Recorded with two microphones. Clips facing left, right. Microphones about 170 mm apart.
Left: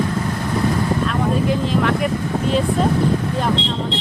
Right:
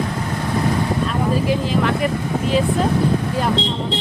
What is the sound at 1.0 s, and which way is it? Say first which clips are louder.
Speech: even; centre (ahead or behind).